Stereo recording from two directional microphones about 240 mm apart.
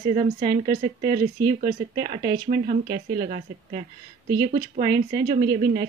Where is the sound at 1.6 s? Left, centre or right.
Right.